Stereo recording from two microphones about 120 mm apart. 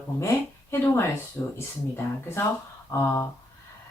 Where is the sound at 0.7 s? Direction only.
20° left (ahead or behind).